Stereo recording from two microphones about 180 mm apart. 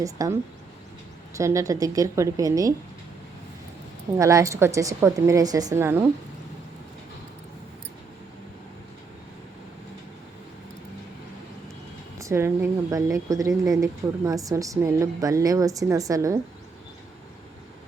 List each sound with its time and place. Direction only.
0.0 s a woman's voice: 20° right (ahead or behind)
4.2 s a woman's voice: 15° right (ahead or behind)
12.2 s a woman's voice: 15° right (ahead or behind)